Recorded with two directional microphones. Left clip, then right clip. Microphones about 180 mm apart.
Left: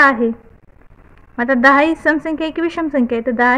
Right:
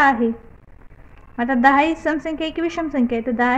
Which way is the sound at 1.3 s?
35° left (ahead or behind).